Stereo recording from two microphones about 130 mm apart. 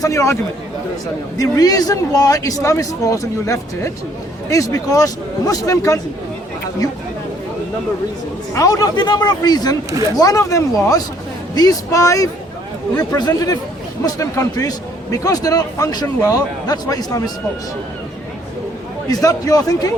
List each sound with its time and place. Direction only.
0.0 s a man's voice: 25° left (ahead or behind)
1.4 s a man's voice: 25° left (ahead or behind)
8.5 s a man's voice: 25° left (ahead or behind)
19.0 s a man's voice: 30° left (ahead or behind)